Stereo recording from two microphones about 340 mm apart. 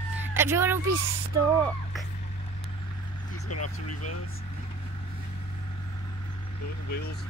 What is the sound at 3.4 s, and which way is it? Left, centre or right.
Speech, left.